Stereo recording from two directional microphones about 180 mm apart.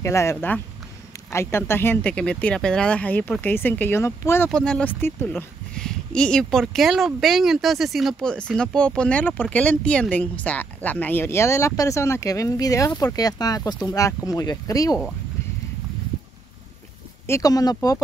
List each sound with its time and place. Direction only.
0.0 s speech: 15° left (ahead or behind)
17.3 s speech: 20° left (ahead or behind)